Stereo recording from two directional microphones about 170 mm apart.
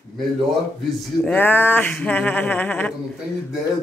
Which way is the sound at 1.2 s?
10° left (ahead or behind).